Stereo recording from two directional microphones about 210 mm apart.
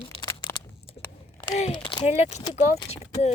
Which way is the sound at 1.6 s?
25° left (ahead or behind).